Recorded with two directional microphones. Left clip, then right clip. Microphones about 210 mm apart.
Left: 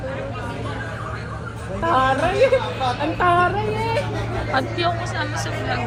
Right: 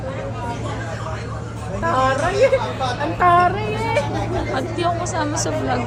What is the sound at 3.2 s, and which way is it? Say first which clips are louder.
Speech: right 4 dB; 20° left (ahead or behind).